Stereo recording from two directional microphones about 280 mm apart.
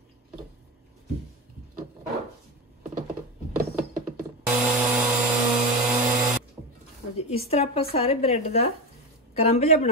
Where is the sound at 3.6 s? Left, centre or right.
Right.